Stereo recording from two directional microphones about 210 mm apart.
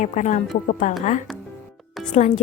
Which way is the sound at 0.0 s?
35° left (ahead or behind).